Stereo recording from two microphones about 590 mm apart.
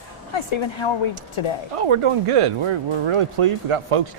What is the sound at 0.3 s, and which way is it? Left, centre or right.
Speech, left.